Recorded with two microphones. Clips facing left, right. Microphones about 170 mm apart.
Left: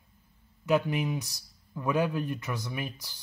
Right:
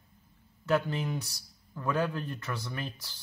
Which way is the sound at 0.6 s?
15° left (ahead or behind).